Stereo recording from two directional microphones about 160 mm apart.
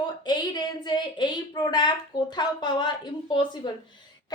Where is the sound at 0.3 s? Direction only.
25° left (ahead or behind).